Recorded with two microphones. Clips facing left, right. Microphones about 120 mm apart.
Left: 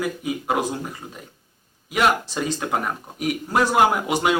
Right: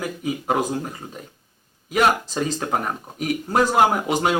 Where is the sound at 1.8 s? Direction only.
40° right (ahead or behind).